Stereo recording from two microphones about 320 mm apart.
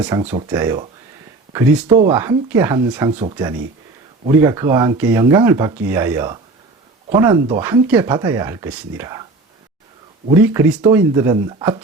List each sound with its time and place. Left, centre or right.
0.1 s speech: centre
10.4 s speech: centre